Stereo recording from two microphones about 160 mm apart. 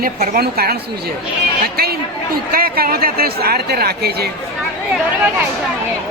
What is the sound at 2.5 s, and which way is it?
Speech, 65° right (ahead or behind).